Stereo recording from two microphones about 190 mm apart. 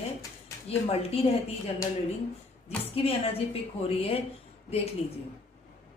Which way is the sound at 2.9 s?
30° left (ahead or behind).